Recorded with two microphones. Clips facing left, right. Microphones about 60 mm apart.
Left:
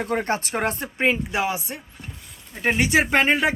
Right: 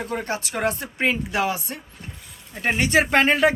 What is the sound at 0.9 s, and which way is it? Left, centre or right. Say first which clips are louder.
Speech: left 2 dB; left.